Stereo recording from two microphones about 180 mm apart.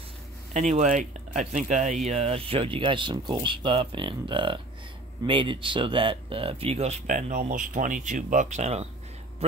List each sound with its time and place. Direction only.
0.5 s speech: 40° right (ahead or behind)